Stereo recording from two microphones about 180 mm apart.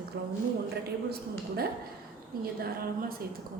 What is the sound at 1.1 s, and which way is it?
Speech, 60° right (ahead or behind).